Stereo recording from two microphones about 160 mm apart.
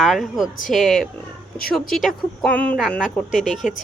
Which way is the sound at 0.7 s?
Centre (ahead or behind).